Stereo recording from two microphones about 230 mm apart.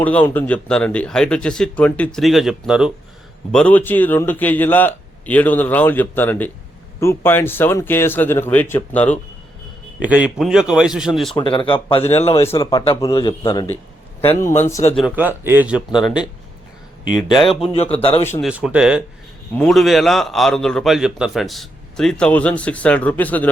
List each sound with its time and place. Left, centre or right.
0.0 s a man's voice: centre
10.0 s a man's voice: centre
11.3 s a man's voice: left
14.9 s a man's voice: centre
17.5 s a man's voice: left
18.4 s a man's voice: centre